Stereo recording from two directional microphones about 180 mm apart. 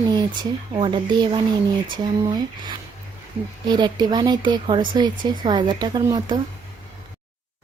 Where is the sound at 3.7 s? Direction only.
25° right (ahead or behind).